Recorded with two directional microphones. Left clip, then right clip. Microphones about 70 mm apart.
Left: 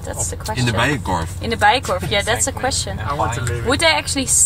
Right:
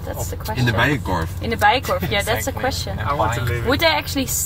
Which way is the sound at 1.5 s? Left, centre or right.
Centre.